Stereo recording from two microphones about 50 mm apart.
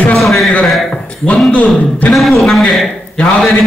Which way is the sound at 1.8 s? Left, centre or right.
Left.